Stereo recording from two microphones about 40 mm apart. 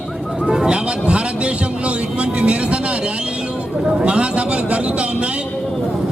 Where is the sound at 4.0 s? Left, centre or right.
Right.